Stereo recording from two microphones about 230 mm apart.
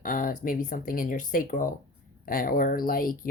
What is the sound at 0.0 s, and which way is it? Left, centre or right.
Speech, left.